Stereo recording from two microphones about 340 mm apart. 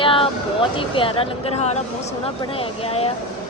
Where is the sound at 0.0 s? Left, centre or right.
Centre.